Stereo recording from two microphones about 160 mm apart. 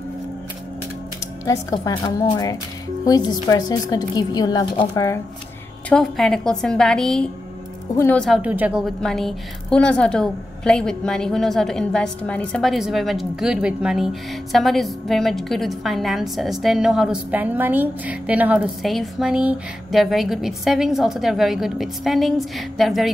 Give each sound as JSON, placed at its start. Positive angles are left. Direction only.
{"t": 1.4, "sound": "a woman's voice", "side_deg": 20}
{"t": 5.9, "sound": "a woman's voice", "side_deg": 5}
{"t": 7.9, "sound": "speech", "side_deg": 15}
{"t": 8.4, "sound": "a woman's voice", "side_deg": -10}